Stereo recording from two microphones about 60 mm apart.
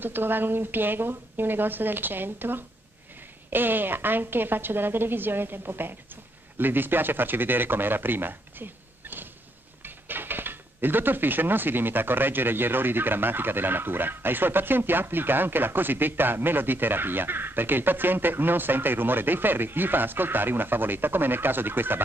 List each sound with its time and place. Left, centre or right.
0.0 s speech: right